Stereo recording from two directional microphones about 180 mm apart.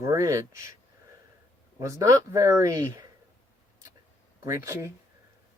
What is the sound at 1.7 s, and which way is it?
A man's voice, 15° right (ahead or behind).